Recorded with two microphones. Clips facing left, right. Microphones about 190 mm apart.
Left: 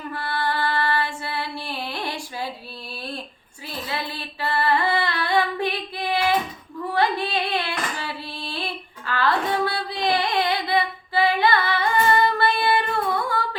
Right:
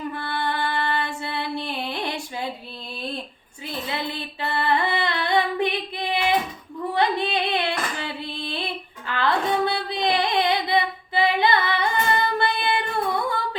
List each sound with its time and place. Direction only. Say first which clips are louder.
0.1 s female singing: left 1 dB; 20° right (ahead or behind)
3.7 s music: right 1 dB; 20° right (ahead or behind)
6.9 s singing: even; 20° right (ahead or behind)
8.4 s child singing: right 1 dB; 20° right (ahead or behind)